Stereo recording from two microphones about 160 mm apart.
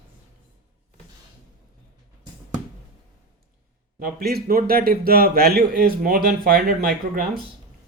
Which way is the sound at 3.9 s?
70° right (ahead or behind).